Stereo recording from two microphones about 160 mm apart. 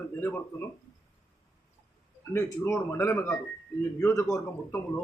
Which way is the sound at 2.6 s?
15° left (ahead or behind).